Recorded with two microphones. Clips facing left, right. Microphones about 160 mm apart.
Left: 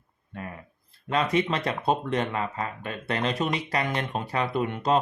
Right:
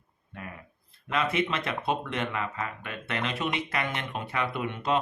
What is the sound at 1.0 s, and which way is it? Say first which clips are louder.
Speech: left 3 dB; 35° left (ahead or behind).